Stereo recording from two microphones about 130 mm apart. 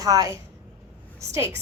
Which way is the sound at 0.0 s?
25° right (ahead or behind).